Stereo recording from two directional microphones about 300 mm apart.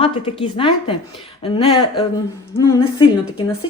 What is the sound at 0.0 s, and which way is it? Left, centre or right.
Speech, centre.